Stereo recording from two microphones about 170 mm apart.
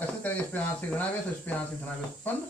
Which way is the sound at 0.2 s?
10° left (ahead or behind).